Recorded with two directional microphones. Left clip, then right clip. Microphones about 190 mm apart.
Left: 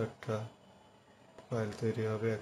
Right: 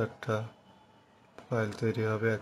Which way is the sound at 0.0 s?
15° right (ahead or behind).